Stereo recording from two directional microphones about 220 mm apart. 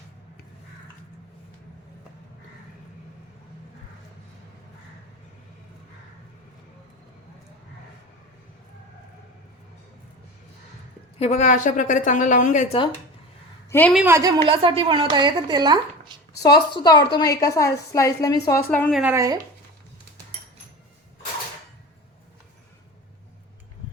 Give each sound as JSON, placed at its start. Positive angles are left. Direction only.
{"t": 11.2, "sound": "a woman's voice", "side_deg": 30}
{"t": 13.7, "sound": "a woman's voice", "side_deg": 10}
{"t": 13.9, "sound": "a woman's voice", "side_deg": -10}
{"t": 16.3, "sound": "a woman's voice", "side_deg": 15}
{"t": 19.1, "sound": "speech", "side_deg": -15}